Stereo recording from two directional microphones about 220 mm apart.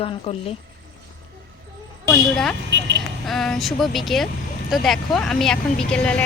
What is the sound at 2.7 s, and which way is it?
Speech, 55° right (ahead or behind).